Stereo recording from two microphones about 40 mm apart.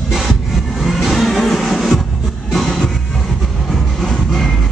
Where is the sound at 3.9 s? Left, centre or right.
Centre.